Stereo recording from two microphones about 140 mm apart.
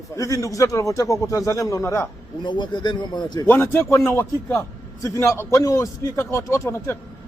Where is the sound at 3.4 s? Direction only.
15° left (ahead or behind).